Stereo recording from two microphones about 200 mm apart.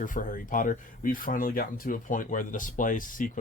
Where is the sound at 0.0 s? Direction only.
40° left (ahead or behind).